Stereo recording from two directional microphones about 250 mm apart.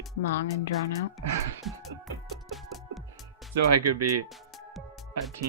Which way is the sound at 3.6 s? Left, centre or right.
Right.